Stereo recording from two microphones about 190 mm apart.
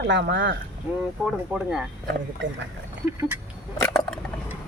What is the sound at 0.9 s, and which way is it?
Speech, 10° right (ahead or behind).